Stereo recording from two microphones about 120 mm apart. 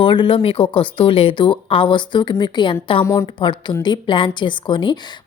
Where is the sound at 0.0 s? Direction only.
45° left (ahead or behind).